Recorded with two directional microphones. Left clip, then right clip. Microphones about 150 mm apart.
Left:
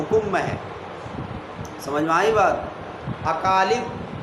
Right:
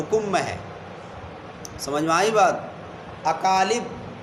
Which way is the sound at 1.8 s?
50° right (ahead or behind).